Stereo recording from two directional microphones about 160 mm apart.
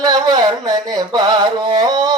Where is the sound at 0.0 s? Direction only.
25° right (ahead or behind).